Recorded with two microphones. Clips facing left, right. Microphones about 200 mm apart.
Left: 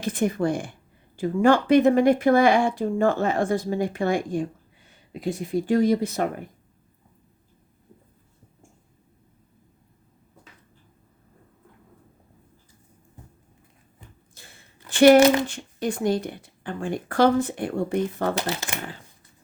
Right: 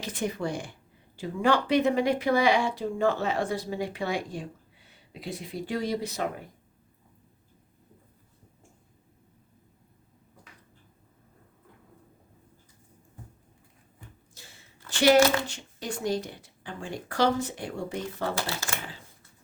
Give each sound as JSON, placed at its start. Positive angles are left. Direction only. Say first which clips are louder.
{"t": 0.0, "sound": "speech", "louder": "left 7 dB", "side_deg": 50}
{"t": 14.4, "sound": "a sound", "louder": "left 2 dB", "side_deg": 55}
{"t": 14.8, "sound": "speech", "louder": "left 7 dB", "side_deg": 55}
{"t": 18.3, "sound": "speech", "louder": "left 4 dB", "side_deg": 20}